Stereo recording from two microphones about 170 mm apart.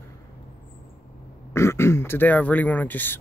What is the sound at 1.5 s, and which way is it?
Speech, 15° left (ahead or behind).